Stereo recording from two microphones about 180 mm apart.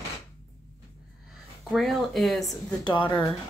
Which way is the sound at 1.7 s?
Centre (ahead or behind).